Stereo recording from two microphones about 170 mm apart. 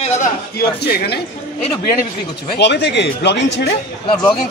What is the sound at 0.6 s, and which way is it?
Speech, 65° left (ahead or behind).